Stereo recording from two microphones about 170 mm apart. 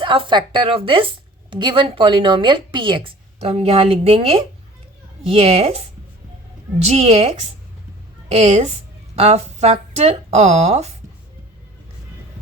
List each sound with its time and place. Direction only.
0.0 s a woman's voice: 30° right (ahead or behind)